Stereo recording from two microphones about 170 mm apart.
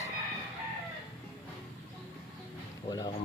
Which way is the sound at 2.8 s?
25° left (ahead or behind).